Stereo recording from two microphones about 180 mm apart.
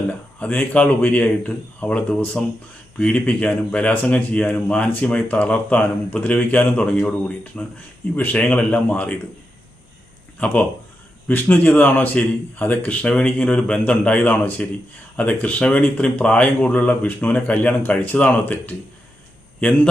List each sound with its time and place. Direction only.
0.1 s speech: 5° left (ahead or behind)
10.4 s a man's voice: 5° left (ahead or behind)